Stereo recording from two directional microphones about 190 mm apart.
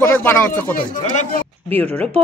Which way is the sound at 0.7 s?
40° left (ahead or behind).